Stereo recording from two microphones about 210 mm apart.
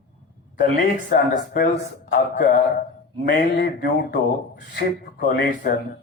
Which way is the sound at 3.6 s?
45° left (ahead or behind).